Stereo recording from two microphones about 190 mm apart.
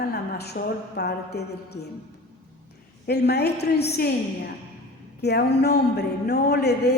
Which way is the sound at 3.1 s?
60° left (ahead or behind).